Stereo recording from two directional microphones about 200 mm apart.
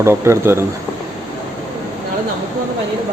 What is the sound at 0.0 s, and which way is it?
Speech, 15° right (ahead or behind).